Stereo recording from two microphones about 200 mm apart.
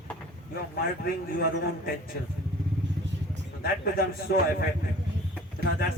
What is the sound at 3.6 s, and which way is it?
A man's voice, 50° left (ahead or behind).